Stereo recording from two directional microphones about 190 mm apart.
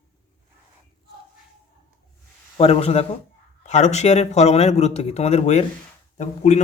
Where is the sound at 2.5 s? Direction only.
35° left (ahead or behind).